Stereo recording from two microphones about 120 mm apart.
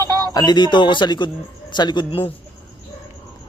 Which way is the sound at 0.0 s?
30° right (ahead or behind).